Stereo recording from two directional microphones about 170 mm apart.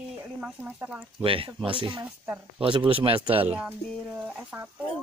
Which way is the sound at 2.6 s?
30° right (ahead or behind).